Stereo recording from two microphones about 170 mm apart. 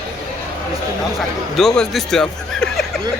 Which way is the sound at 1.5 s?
Centre (ahead or behind).